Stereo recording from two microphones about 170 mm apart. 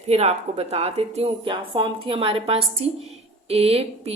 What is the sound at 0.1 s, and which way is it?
Speech, 40° right (ahead or behind).